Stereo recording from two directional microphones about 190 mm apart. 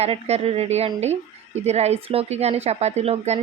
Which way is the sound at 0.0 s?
35° right (ahead or behind).